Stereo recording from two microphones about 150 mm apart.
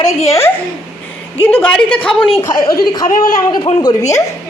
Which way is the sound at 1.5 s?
10° left (ahead or behind).